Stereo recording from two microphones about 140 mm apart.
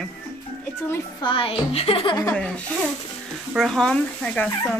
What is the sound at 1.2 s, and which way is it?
A woman's voice, 40° left (ahead or behind).